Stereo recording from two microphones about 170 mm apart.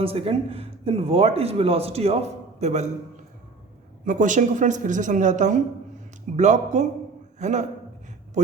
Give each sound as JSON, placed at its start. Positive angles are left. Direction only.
{"t": 0.0, "sound": "speech", "side_deg": -35}
{"t": 4.0, "sound": "a woman's voice", "side_deg": -50}